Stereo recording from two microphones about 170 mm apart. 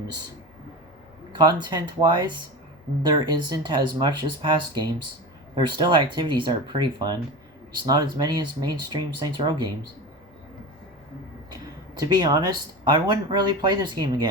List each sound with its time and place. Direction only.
1.3 s speech: 25° right (ahead or behind)
11.9 s speech: 25° right (ahead or behind)